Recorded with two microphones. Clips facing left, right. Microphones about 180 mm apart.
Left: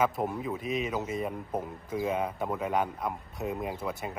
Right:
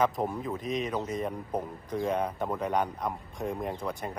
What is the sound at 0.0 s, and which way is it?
A man's voice, 5° left (ahead or behind).